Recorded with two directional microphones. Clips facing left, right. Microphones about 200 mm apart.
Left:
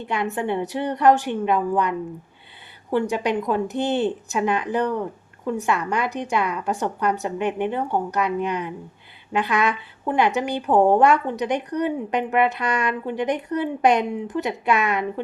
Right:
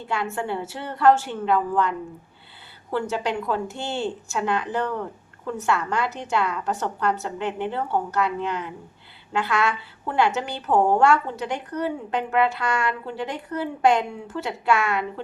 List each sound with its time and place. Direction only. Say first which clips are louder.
0.0 s a woman's voice: left 3 dB; 20° left (ahead or behind)